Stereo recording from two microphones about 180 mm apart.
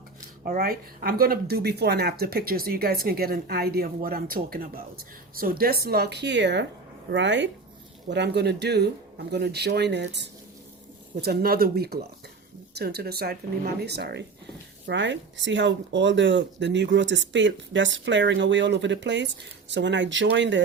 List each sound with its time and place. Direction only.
0.4 s speech: 55° right (ahead or behind); by 7.5 s 85° right
8.1 s speech: 70° right (ahead or behind)
11.2 s speech: 60° right (ahead or behind)
14.8 s speech: 90° right